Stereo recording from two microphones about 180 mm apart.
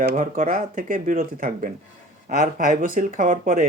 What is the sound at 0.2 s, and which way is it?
Speech, 45° right (ahead or behind).